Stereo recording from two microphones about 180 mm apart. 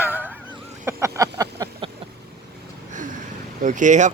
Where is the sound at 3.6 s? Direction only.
45° right (ahead or behind).